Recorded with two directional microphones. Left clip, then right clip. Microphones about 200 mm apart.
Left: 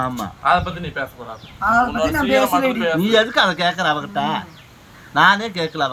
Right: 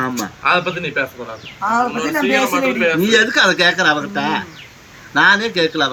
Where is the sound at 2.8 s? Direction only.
35° left (ahead or behind).